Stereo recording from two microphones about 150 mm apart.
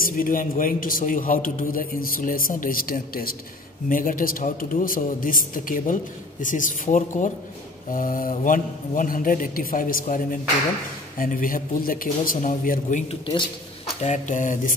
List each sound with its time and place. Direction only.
0.0 s a man's voice: 70° left (ahead or behind)
14.0 s speech: 55° left (ahead or behind)